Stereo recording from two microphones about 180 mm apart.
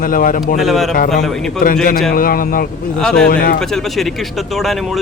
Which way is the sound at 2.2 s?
50° left (ahead or behind).